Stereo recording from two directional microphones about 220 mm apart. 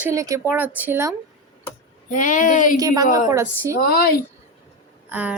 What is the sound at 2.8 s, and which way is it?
Speech, 15° right (ahead or behind).